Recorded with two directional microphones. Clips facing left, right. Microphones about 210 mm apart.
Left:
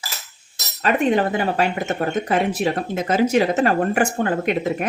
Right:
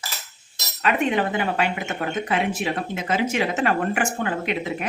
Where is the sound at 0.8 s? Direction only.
35° left (ahead or behind).